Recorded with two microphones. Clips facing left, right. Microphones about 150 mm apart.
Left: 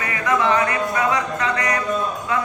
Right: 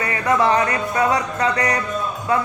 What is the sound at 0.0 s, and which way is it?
Music, 35° right (ahead or behind).